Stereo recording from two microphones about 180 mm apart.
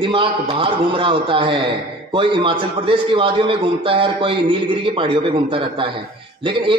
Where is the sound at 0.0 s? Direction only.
30° right (ahead or behind).